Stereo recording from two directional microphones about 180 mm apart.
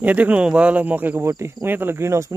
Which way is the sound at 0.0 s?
10° right (ahead or behind).